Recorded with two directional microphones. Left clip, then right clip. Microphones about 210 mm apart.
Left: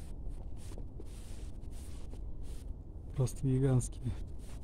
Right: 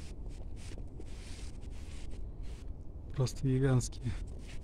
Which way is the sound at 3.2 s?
10° left (ahead or behind).